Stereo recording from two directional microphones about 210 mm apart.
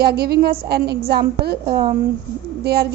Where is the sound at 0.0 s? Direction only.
50° right (ahead or behind).